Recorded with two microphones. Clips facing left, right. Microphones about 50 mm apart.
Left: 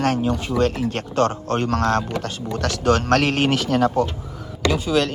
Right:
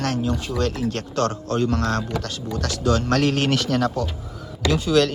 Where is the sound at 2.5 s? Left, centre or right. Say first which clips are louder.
Left 3 dB; left.